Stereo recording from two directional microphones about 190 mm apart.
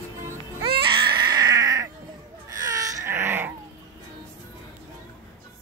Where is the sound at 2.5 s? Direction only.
15° right (ahead or behind).